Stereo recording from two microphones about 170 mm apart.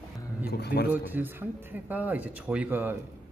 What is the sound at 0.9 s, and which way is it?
A man's voice, 10° right (ahead or behind).